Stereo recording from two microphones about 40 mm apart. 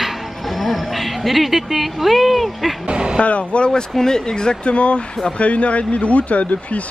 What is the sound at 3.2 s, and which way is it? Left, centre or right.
Speech, left.